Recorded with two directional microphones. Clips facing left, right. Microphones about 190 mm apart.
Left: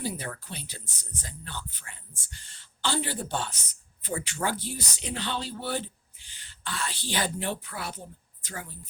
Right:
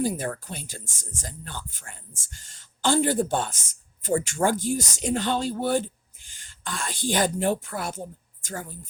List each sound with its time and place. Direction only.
0.0 s speech: 45° right (ahead or behind)